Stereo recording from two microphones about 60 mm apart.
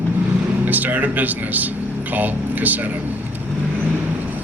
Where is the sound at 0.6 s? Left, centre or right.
Right.